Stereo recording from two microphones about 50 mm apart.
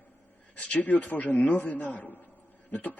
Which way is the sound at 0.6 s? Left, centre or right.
Left.